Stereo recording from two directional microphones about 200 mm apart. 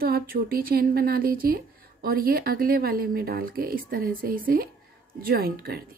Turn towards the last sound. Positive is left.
turn(degrees=-50)  # may be behind; listen again after turning